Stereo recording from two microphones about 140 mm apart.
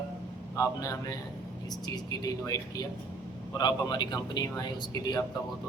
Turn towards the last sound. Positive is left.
turn(degrees=30)  # may be behind; listen again after turning